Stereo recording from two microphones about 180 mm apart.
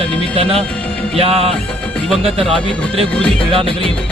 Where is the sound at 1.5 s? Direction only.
5° left (ahead or behind).